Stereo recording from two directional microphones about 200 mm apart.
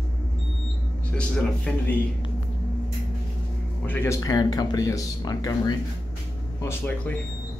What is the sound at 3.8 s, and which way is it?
Speech, 10° left (ahead or behind).